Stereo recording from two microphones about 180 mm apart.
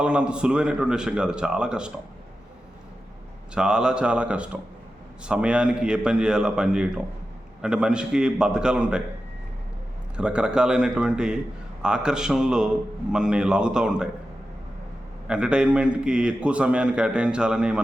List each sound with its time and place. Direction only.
0.0 s a man's voice: 5° right (ahead or behind)
3.5 s a man's voice: 5° right (ahead or behind)
10.2 s a man's voice: 5° right (ahead or behind)
15.3 s a man's voice: 5° right (ahead or behind)